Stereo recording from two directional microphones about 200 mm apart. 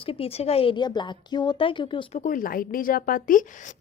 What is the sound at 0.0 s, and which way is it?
A woman's voice, 30° left (ahead or behind).